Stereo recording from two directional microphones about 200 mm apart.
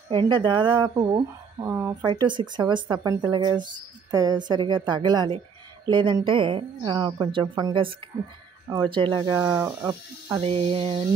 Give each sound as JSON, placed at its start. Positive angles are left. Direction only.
{"t": 0.1, "sound": "speech", "side_deg": -25}
{"t": 2.2, "sound": "speech", "side_deg": -20}